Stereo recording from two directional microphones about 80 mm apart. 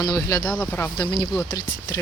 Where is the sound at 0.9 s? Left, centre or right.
Left.